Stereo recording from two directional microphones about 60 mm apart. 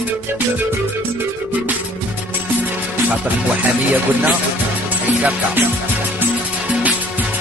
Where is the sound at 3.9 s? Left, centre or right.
Right.